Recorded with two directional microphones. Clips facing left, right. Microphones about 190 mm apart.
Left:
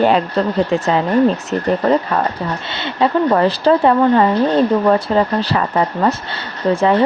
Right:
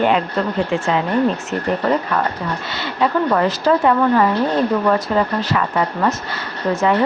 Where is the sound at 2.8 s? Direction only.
25° left (ahead or behind).